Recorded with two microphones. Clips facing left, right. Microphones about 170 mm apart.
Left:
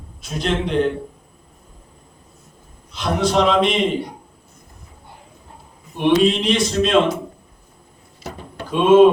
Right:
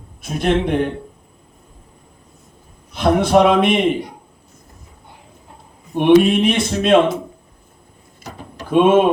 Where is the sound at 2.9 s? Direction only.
55° right (ahead or behind).